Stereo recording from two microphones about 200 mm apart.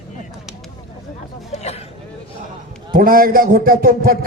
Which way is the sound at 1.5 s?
30° left (ahead or behind).